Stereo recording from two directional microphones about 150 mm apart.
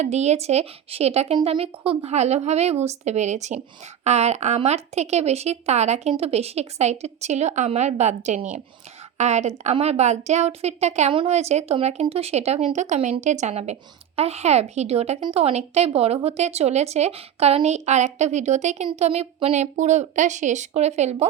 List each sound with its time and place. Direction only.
0.0 s speech: 45° right (ahead or behind)